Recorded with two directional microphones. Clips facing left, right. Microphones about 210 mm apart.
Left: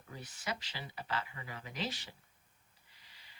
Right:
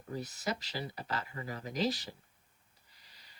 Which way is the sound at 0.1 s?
40° right (ahead or behind).